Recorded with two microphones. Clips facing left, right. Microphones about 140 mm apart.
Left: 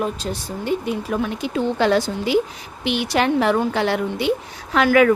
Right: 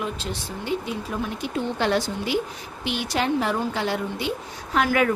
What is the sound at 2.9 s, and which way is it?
Speech, 75° left (ahead or behind).